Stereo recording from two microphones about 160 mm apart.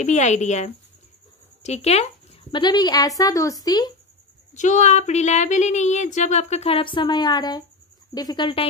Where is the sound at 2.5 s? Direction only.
25° left (ahead or behind).